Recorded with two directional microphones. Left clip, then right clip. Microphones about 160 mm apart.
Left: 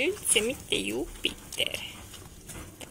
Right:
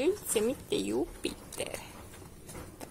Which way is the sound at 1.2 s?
70° right (ahead or behind).